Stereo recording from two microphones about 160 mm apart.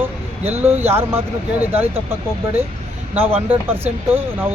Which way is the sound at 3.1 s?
15° right (ahead or behind).